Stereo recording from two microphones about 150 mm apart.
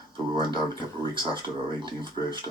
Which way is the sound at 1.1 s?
35° right (ahead or behind).